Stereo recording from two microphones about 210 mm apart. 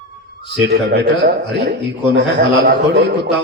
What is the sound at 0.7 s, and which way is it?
A man's voice, 50° right (ahead or behind).